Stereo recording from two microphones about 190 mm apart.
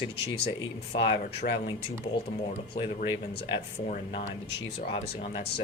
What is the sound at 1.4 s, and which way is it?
Speech, 45° left (ahead or behind).